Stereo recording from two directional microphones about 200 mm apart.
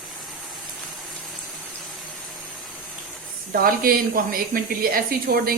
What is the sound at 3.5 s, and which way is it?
A woman's voice, 45° right (ahead or behind).